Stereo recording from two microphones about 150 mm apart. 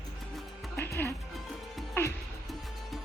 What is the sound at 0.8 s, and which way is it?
Music, 15° left (ahead or behind).